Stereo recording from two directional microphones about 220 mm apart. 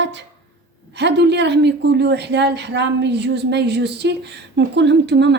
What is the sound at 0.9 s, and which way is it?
Speech, 50° right (ahead or behind).